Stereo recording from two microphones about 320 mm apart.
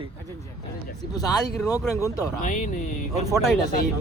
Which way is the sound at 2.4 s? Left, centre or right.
Left.